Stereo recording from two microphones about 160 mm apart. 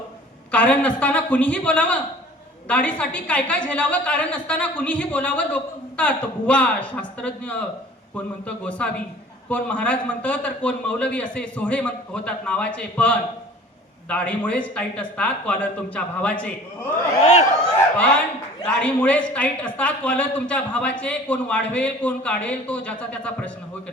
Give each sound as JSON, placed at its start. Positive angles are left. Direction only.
{"t": 0.5, "sound": "a woman's voice", "side_deg": 10}
{"t": 17.7, "sound": "a woman's voice", "side_deg": 10}